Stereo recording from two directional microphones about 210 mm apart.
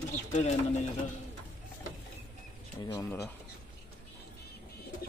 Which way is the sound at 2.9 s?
15° left (ahead or behind).